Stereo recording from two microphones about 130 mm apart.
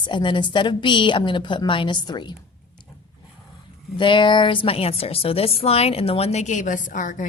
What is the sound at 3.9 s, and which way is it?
A woman's voice, 40° left (ahead or behind).